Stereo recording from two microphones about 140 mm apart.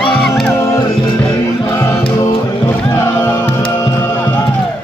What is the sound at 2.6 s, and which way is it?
Music, 20° left (ahead or behind).